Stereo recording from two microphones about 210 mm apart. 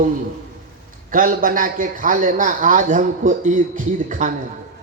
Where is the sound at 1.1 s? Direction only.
40° right (ahead or behind).